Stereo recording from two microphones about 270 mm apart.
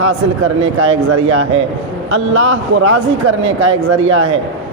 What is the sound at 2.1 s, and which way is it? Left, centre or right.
Speech, right.